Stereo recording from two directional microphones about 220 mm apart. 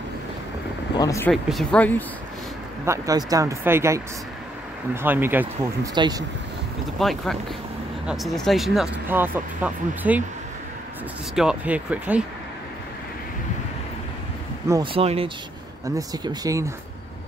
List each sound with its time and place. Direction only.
0.9 s speech: 15° left (ahead or behind)
1.3 s speech: centre (ahead or behind)
2.8 s speech: 15° right (ahead or behind)
7.0 s speech: centre (ahead or behind)
11.3 s speech: 5° right (ahead or behind)
14.7 s speech: 25° right (ahead or behind)